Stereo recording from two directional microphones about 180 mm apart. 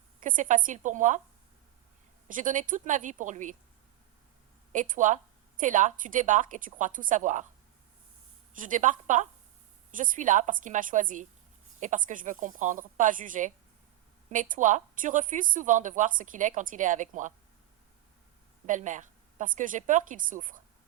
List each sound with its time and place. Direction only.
0.2 s speech: 45° right (ahead or behind)
2.2 s speech: 45° right (ahead or behind)
4.7 s speech: 45° right (ahead or behind)
8.5 s speech: 45° right (ahead or behind)
18.6 s speech: 45° right (ahead or behind)